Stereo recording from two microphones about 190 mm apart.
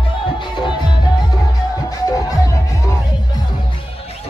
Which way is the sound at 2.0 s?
15° left (ahead or behind).